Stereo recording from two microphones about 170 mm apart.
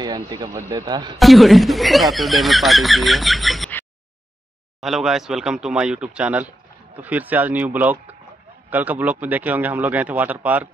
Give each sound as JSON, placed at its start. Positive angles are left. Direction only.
{"t": 0.0, "sound": "a man's voice", "side_deg": -25}
{"t": 1.1, "sound": "speech", "side_deg": 0}
{"t": 4.7, "sound": "speech", "side_deg": 0}